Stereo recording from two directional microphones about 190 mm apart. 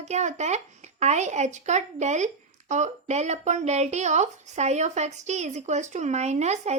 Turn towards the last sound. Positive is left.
turn(degrees=-35)  # may be behind; listen again after turning